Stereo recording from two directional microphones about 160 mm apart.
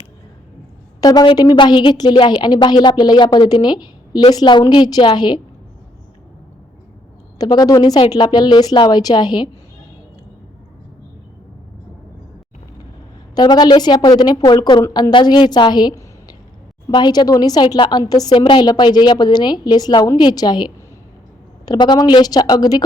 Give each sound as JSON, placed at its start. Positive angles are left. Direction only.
{"t": 1.0, "sound": "a woman's voice", "side_deg": 25}
{"t": 7.3, "sound": "a woman's voice", "side_deg": 25}
{"t": 13.3, "sound": "a woman's voice", "side_deg": 25}